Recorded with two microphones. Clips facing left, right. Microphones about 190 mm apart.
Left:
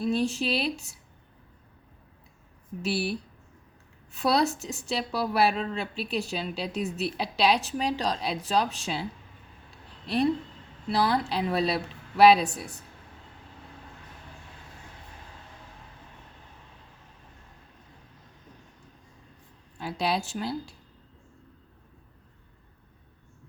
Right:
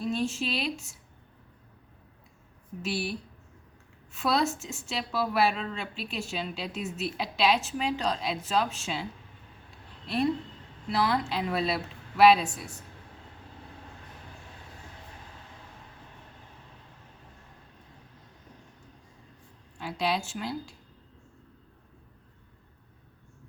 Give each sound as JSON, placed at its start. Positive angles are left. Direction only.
{"t": 0.0, "sound": "a woman's voice", "side_deg": 35}
{"t": 2.8, "sound": "a woman's voice", "side_deg": 35}
{"t": 10.9, "sound": "a woman's voice", "side_deg": 30}
{"t": 19.8, "sound": "a woman's voice", "side_deg": 35}